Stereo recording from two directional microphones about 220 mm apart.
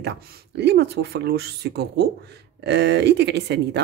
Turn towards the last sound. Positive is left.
turn(degrees=-50)  # may be behind; listen again after turning